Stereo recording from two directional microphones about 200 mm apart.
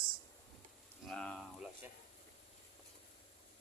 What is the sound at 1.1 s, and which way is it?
Speech, 5° left (ahead or behind).